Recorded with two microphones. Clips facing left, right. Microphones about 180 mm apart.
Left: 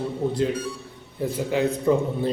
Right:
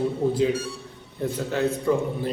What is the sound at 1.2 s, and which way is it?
Speech, 10° left (ahead or behind).